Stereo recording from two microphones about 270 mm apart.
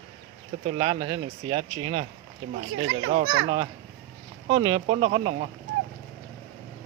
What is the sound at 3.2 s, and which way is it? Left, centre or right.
Speech, right.